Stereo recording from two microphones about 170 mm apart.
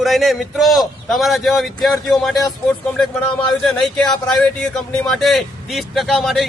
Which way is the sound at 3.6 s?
5° left (ahead or behind).